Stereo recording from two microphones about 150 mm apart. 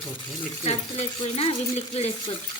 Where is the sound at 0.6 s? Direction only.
45° left (ahead or behind).